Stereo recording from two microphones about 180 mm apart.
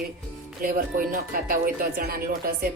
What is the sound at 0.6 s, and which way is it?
Speech, 50° right (ahead or behind).